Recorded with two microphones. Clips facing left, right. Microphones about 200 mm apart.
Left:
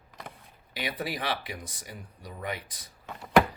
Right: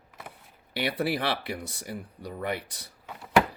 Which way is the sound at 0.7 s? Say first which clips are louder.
Right 6 dB; 70° right (ahead or behind).